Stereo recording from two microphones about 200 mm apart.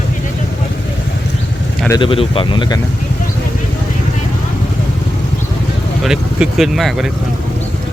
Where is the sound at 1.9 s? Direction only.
25° left (ahead or behind).